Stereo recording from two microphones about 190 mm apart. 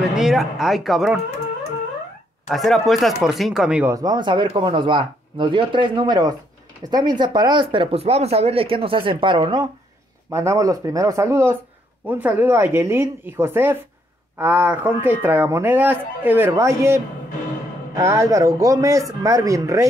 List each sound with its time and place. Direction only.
0.1 s speech: centre (ahead or behind)
2.4 s speech: centre (ahead or behind)
3.9 s speech: 20° right (ahead or behind)